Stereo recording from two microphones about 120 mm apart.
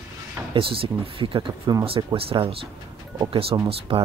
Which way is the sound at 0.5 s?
50° right (ahead or behind).